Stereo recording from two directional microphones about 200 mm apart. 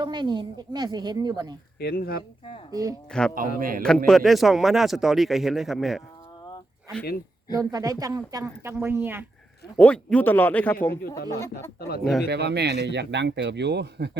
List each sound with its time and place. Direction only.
0.0 s a woman's voice: 20° right (ahead or behind)
1.8 s speech: 50° left (ahead or behind)
3.1 s speech: 5° left (ahead or behind)
3.6 s a man's voice: 45° right (ahead or behind)
3.8 s speech: 5° left (ahead or behind)
7.5 s a woman's voice: 15° right (ahead or behind)
9.7 s a man's voice: 5° left (ahead or behind)
11.8 s speech: 50° left (ahead or behind)
12.3 s speech: 55° right (ahead or behind)